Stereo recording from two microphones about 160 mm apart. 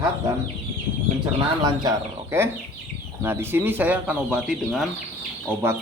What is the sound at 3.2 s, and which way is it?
Speech, 15° right (ahead or behind).